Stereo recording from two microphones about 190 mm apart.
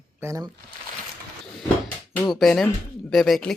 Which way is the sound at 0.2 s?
15° right (ahead or behind).